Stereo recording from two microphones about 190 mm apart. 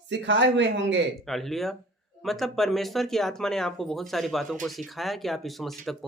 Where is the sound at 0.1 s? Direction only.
70° right (ahead or behind).